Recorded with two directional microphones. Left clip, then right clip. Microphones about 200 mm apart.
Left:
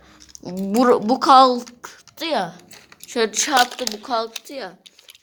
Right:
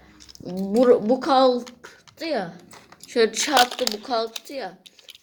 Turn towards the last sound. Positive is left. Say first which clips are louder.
# even
turn(degrees=25)  # may be behind; listen again after turning